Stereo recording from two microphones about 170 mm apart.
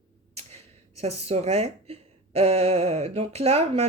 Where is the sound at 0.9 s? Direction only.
40° right (ahead or behind).